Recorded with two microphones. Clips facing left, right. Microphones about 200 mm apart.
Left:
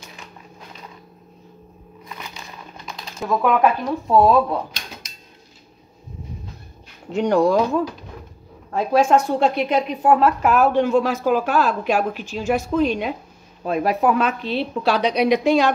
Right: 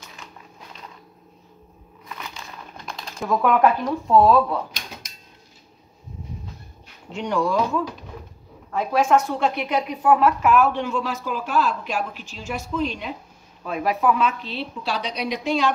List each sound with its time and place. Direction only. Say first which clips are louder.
2.8 s speech: left 1 dB; centre (ahead or behind)
7.1 s a woman's voice: left 7 dB; 40° left (ahead or behind); by 15.6 s 60° left (ahead or behind)